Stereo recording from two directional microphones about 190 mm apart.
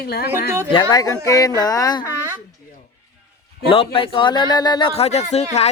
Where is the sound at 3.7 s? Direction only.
30° left (ahead or behind).